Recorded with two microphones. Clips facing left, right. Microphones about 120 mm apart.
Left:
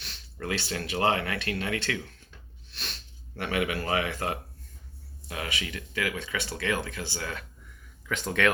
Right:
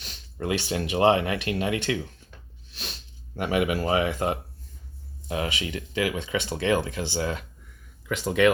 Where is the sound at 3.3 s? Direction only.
15° right (ahead or behind).